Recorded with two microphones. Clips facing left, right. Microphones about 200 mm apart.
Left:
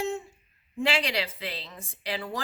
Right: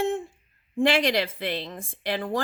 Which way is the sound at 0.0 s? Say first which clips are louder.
Right 5 dB; 50° right (ahead or behind).